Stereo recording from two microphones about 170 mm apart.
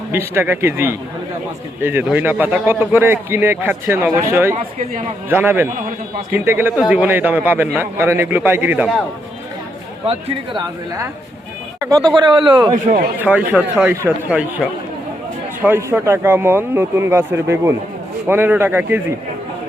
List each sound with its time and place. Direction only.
0.1 s a man's voice: 15° right (ahead or behind)
10.1 s speech: 35° right (ahead or behind)
11.9 s speech: 25° right (ahead or behind)
12.7 s speech: 50° right (ahead or behind)
13.1 s a man's voice: 10° right (ahead or behind)